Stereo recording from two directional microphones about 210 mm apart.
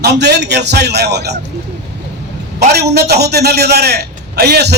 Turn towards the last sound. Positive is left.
turn(degrees=-50)  # may be behind; listen again after turning